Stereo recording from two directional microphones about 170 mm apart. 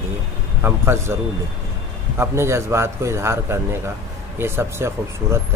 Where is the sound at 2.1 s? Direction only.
15° right (ahead or behind).